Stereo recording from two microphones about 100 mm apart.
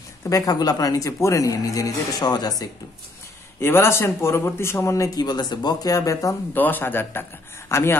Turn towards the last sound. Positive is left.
turn(degrees=25)  # may be behind; listen again after turning